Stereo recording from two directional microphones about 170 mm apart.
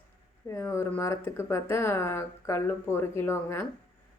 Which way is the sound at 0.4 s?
15° left (ahead or behind).